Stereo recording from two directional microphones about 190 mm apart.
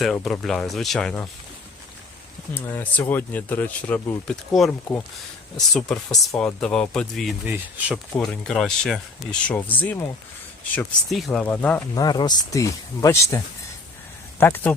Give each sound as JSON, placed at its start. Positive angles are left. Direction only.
{"t": 0.0, "sound": "speech", "side_deg": 0}
{"t": 2.6, "sound": "speech", "side_deg": 10}
{"t": 5.7, "sound": "speech", "side_deg": 5}
{"t": 7.4, "sound": "speech", "side_deg": -10}
{"t": 8.2, "sound": "speech", "side_deg": 5}
{"t": 11.9, "sound": "speech", "side_deg": 20}